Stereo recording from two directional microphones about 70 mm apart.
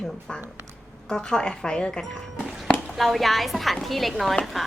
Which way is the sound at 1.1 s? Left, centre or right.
Centre.